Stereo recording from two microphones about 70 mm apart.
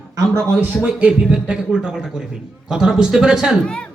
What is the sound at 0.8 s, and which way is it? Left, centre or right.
A man's voice, centre.